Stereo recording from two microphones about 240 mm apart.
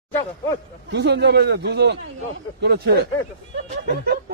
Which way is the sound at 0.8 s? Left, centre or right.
Right.